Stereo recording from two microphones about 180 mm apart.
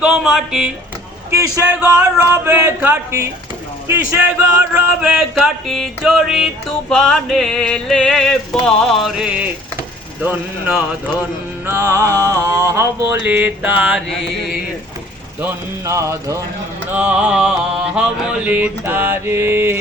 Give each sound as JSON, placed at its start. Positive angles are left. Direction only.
{"t": 0.0, "sound": "music", "side_deg": 0}
{"t": 1.3, "sound": "mantra", "side_deg": -15}
{"t": 3.8, "sound": "music", "side_deg": -15}
{"t": 11.6, "sound": "mantra", "side_deg": -15}
{"t": 15.4, "sound": "mantra", "side_deg": -15}